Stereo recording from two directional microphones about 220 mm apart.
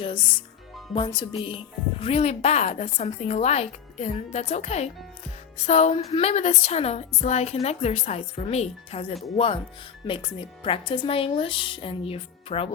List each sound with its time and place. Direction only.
0.0 s speech: 20° left (ahead or behind)